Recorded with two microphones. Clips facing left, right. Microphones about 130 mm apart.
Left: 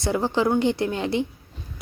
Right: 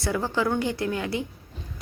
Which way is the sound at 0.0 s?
20° left (ahead or behind).